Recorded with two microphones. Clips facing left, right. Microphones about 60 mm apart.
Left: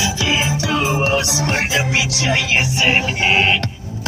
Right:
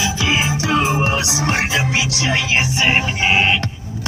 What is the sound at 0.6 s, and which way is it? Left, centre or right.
Music, right.